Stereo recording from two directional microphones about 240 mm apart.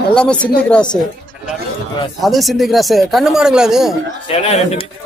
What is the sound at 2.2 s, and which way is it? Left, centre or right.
Speech, centre.